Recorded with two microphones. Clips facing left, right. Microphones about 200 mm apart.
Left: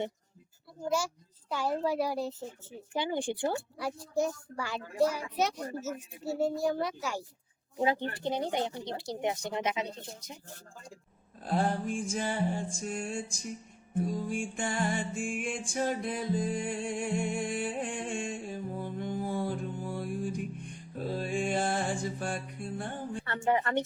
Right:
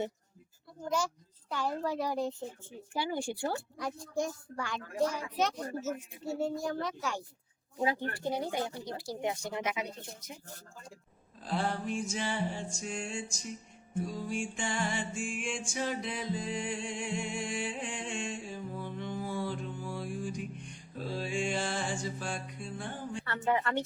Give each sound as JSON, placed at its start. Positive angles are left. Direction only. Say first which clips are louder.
{"t": 0.9, "sound": "a child's voice", "louder": "left 2 dB", "side_deg": 10}
{"t": 2.9, "sound": "speech", "louder": "left 2 dB", "side_deg": 20}
{"t": 3.8, "sound": "a child's voice", "louder": "left 3 dB", "side_deg": 10}
{"t": 7.8, "sound": "speech", "louder": "left 2 dB", "side_deg": 25}
{"t": 11.4, "sound": "music", "louder": "left 3 dB", "side_deg": 50}
{"t": 23.2, "sound": "speech", "louder": "left 2 dB", "side_deg": 20}